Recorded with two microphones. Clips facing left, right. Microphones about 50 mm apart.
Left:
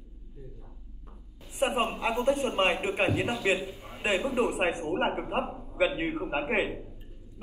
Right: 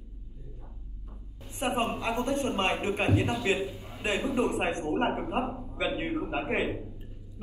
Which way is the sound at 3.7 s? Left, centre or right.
Left.